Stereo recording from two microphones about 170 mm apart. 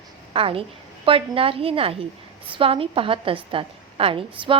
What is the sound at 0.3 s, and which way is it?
A woman's voice, 35° right (ahead or behind).